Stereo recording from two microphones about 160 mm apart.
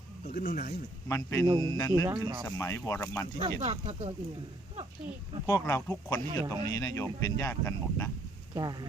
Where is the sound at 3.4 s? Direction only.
45° right (ahead or behind).